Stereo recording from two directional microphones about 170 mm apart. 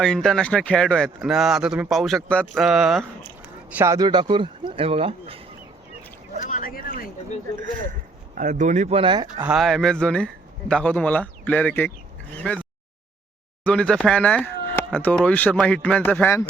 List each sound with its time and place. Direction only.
0.0 s speech: 5° left (ahead or behind)
3.7 s speech: 15° right (ahead or behind); by 5.4 s 35° right (ahead or behind)
6.4 s a sound: 50° left (ahead or behind)
8.4 s speech: 45° right (ahead or behind); by 9.2 s 30° right (ahead or behind)
9.4 s speech: 5° right (ahead or behind)
13.7 s speech: 5° left (ahead or behind)